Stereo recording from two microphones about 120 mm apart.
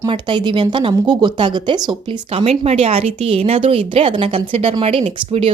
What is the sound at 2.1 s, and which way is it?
Speech, 55° right (ahead or behind).